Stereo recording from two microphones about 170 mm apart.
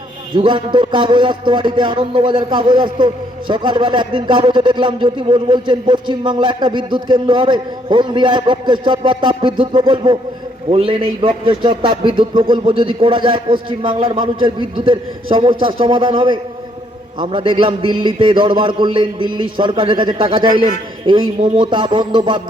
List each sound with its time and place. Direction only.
0.3 s a man's voice: 30° right (ahead or behind)